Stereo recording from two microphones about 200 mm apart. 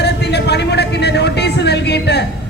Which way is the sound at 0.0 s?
55° left (ahead or behind).